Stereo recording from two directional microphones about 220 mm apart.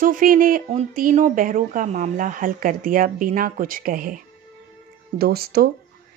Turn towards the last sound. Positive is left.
turn(degrees=-45)  # may be behind; listen again after turning